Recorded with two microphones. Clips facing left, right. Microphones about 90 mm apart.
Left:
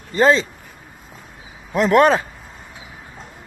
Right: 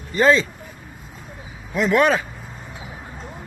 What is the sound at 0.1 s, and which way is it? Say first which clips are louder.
Speech: left 1 dB; 30° left (ahead or behind).